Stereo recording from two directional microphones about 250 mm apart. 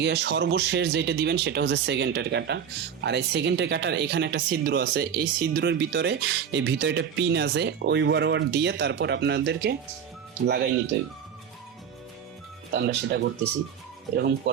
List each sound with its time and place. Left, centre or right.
0.0 s speech: right
12.7 s speech: right